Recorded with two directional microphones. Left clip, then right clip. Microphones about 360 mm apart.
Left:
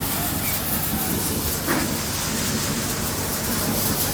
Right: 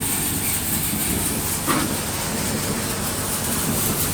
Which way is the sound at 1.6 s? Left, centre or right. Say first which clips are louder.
Right 2 dB; right.